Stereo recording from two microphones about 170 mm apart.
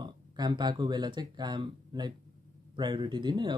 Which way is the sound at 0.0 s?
25° right (ahead or behind).